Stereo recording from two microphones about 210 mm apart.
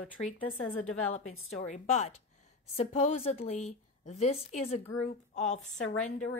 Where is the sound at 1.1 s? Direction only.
75° left (ahead or behind).